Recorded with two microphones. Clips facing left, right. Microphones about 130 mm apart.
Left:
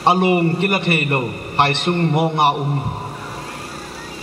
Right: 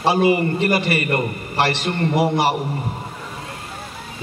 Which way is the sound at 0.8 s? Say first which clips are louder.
Left 1 dB; 25° left (ahead or behind).